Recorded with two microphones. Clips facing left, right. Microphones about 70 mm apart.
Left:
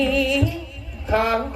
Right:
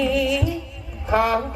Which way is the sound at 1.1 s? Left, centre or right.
Right.